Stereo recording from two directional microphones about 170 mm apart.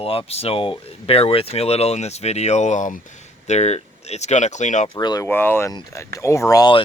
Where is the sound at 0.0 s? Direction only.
35° left (ahead or behind).